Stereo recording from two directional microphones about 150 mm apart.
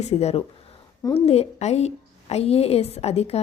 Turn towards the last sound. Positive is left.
turn(degrees=45)  # may be behind; listen again after turning